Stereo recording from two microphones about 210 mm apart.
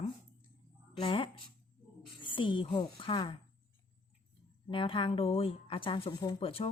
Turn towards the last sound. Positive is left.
turn(degrees=25)  # may be behind; listen again after turning